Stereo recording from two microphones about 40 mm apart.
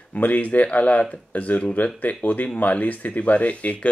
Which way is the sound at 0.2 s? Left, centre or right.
Left.